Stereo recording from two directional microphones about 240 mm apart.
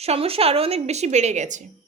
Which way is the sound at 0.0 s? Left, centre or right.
Right.